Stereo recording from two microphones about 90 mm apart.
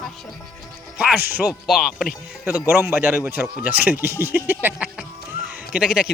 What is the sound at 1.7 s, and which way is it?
Speech, 5° right (ahead or behind).